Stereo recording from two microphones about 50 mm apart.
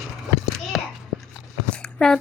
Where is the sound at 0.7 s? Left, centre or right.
Centre.